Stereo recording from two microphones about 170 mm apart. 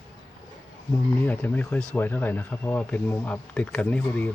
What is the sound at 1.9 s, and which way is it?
Speech, 10° left (ahead or behind).